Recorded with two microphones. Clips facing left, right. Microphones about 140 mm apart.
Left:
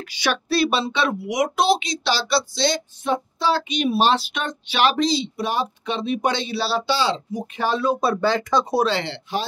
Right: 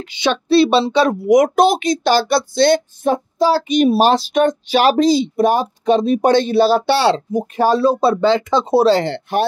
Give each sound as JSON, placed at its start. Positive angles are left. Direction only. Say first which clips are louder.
{"t": 0.0, "sound": "speech", "louder": "right 5 dB", "side_deg": -25}
{"t": 7.5, "sound": "speech", "louder": "right 7 dB", "side_deg": -40}
{"t": 8.8, "sound": "speech", "louder": "right 9 dB", "side_deg": -45}